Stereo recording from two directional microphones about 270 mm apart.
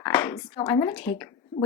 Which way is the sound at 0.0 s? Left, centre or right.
Centre.